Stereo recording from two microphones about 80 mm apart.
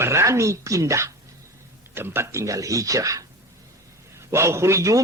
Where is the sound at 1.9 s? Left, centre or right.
Right.